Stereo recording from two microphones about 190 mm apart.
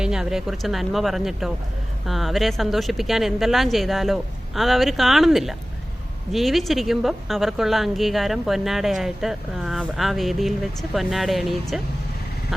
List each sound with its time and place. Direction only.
0.0 s a woman's voice: 5° right (ahead or behind)